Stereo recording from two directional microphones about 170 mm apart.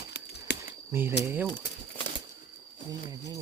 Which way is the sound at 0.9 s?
15° right (ahead or behind).